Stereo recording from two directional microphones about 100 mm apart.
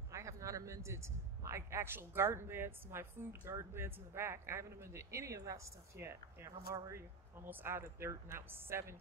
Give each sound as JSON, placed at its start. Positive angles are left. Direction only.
{"t": 0.1, "sound": "a man's voice", "side_deg": -30}